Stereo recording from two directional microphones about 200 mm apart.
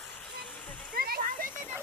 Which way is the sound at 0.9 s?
45° right (ahead or behind).